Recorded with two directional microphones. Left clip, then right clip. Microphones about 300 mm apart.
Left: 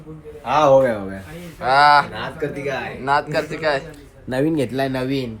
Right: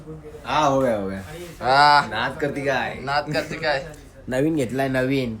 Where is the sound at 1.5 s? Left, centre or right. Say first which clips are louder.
Left 2 dB; centre.